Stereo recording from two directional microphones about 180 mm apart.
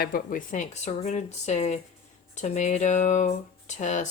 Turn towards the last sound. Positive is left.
turn(degrees=40)  # may be behind; listen again after turning